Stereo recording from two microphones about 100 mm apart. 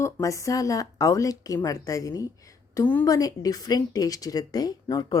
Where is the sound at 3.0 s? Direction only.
35° left (ahead or behind).